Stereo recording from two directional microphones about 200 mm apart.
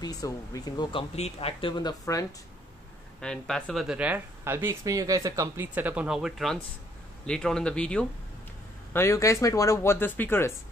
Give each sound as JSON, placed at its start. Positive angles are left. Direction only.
{"t": 0.0, "sound": "speech", "side_deg": 20}
{"t": 3.2, "sound": "speech", "side_deg": 5}